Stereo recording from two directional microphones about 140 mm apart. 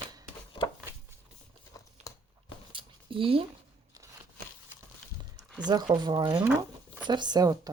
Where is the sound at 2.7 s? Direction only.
40° right (ahead or behind).